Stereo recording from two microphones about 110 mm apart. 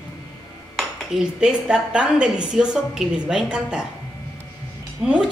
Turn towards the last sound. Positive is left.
turn(degrees=-10)  # may be behind; listen again after turning